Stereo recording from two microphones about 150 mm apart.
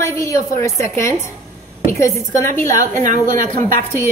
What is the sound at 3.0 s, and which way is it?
Speech, 60° right (ahead or behind).